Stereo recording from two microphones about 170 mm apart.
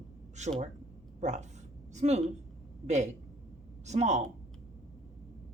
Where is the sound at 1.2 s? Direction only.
45° right (ahead or behind).